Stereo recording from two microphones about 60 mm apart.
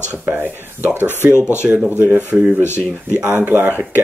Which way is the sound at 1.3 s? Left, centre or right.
Left.